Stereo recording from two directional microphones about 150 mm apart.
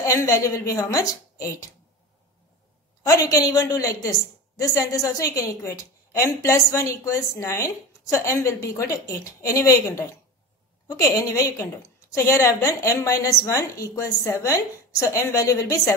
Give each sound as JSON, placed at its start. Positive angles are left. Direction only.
{"t": 0.0, "sound": "a woman's voice", "side_deg": 20}
{"t": 3.1, "sound": "a woman's voice", "side_deg": 20}